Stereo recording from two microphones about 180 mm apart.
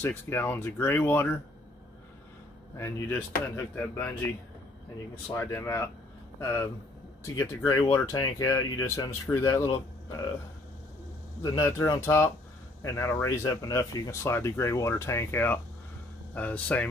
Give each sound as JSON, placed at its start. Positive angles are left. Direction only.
{"t": 0.0, "sound": "speech", "side_deg": 15}
{"t": 2.8, "sound": "speech", "side_deg": 15}
{"t": 5.3, "sound": "speech", "side_deg": 15}
{"t": 11.4, "sound": "speech", "side_deg": 15}